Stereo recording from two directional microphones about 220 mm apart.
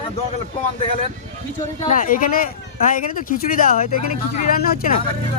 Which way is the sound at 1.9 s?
40° left (ahead or behind).